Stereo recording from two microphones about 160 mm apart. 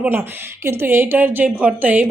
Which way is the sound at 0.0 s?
15° right (ahead or behind).